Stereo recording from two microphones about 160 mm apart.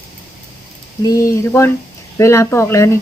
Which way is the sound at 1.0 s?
20° left (ahead or behind).